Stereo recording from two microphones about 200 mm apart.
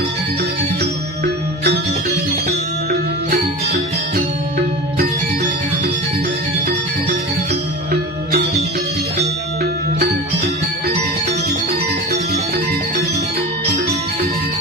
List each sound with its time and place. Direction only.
0.8 s music: 55° right (ahead or behind)